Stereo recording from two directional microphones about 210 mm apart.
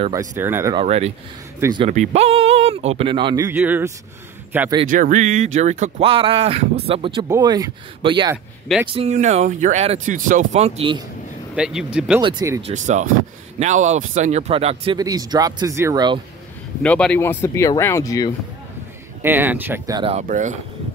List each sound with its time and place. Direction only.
0.4 s speech: 10° right (ahead or behind)
0.7 s speech: 30° right (ahead or behind)
1.9 s speech: 30° right (ahead or behind); by 4.7 s 10° right (ahead or behind)
4.9 s speech: 40° right (ahead or behind)
11.5 s speech: 5° right (ahead or behind)
12.2 s speech: 20° right (ahead or behind)
12.6 s speech: 35° right (ahead or behind); by 16.2 s 20° right (ahead or behind)
16.8 s speech: 5° left (ahead or behind)
19.2 s speech: 10° right (ahead or behind)
20.0 s speech: 30° right (ahead or behind)